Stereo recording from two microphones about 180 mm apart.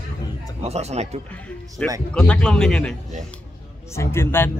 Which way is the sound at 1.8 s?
5° left (ahead or behind).